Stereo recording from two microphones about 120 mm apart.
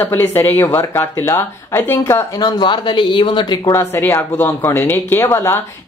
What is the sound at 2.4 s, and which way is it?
Speech, 40° left (ahead or behind).